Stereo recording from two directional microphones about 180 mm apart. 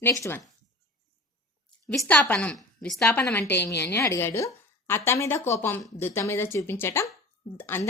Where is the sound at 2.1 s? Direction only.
5° left (ahead or behind).